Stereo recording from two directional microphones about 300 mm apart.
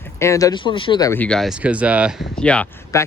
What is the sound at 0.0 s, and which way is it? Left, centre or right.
Speech, centre.